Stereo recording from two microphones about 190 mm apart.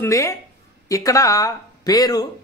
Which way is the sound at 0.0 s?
15° left (ahead or behind).